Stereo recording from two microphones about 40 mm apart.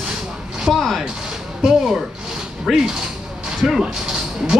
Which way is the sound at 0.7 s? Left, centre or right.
Centre.